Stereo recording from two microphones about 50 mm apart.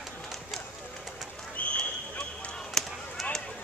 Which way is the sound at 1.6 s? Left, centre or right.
Left.